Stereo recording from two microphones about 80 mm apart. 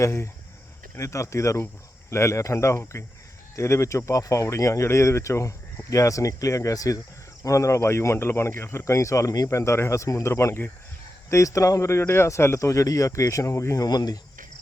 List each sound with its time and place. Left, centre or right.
0.0 s speech: left
9.5 s speech: left
13.8 s speech: left